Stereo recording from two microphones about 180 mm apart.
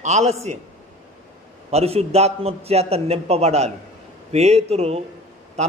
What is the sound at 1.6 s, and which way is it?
A man's voice, 35° right (ahead or behind).